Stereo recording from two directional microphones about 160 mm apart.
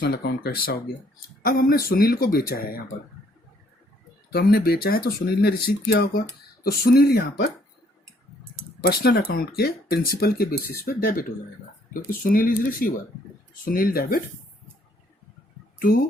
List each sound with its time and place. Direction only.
0.0 s speech: 90° left; by 2.8 s 65° left (ahead or behind)
4.3 s speech: 75° left (ahead or behind)
8.8 s speech: 85° left; by 14.2 s 65° left (ahead or behind)